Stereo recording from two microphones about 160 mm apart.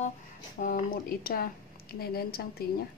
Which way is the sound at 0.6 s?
65° left (ahead or behind).